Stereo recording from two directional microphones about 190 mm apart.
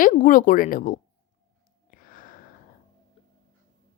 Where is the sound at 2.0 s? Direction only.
45° left (ahead or behind).